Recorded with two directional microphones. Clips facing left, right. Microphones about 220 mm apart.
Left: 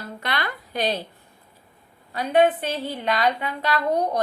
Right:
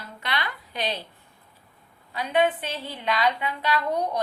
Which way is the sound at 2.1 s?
45° left (ahead or behind).